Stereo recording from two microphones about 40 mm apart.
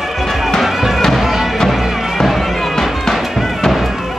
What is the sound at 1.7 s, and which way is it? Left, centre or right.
Music, centre.